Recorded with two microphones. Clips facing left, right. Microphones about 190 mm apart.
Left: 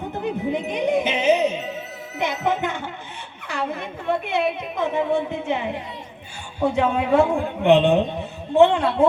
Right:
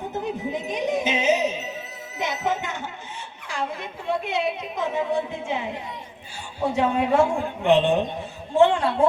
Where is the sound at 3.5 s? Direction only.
60° left (ahead or behind).